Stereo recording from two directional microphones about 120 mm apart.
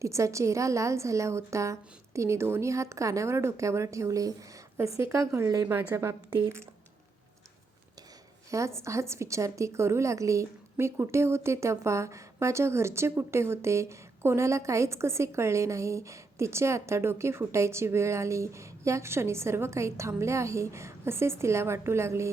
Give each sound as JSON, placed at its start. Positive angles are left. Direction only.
{"t": 0.0, "sound": "a woman's voice", "side_deg": -25}
{"t": 8.4, "sound": "a woman's voice", "side_deg": -25}